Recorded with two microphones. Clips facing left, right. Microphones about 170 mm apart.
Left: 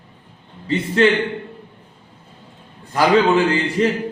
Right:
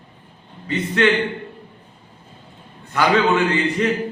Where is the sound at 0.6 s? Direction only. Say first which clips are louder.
Left 3 dB; 30° left (ahead or behind).